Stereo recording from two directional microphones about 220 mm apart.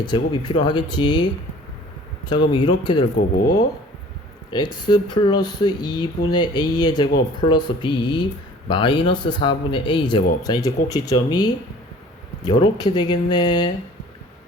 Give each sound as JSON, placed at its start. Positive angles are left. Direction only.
{"t": 0.0, "sound": "speech", "side_deg": 20}
{"t": 4.5, "sound": "speech", "side_deg": 20}